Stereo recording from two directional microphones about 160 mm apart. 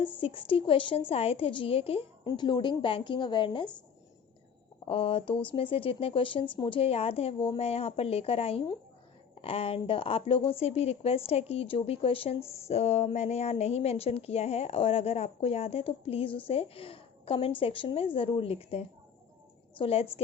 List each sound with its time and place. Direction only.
0.2 s a woman's voice: 35° left (ahead or behind)
4.9 s a woman's voice: 35° left (ahead or behind)